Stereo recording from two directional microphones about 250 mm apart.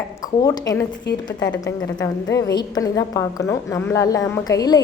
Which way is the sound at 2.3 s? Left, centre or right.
Centre.